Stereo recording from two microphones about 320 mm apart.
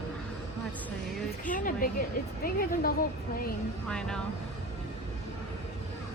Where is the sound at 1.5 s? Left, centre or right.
Left.